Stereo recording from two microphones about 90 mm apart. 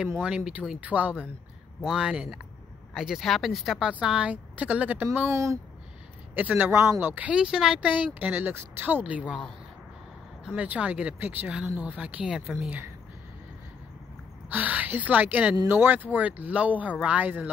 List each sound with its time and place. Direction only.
0.2 s speech: 15° right (ahead or behind)
1.8 s speech: 5° right (ahead or behind); by 5.6 s 35° right (ahead or behind)
6.3 s speech: 20° right (ahead or behind)
10.4 s speech: 10° right (ahead or behind)
14.5 s speech: 15° right (ahead or behind)